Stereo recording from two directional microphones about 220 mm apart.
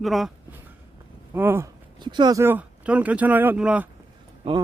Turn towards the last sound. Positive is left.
turn(degrees=-20)  # may be behind; listen again after turning